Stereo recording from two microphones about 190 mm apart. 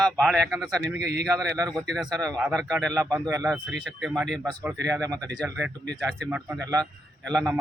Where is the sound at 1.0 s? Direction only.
60° right (ahead or behind).